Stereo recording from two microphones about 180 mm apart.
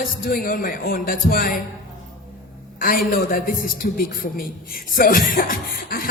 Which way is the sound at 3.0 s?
55° left (ahead or behind).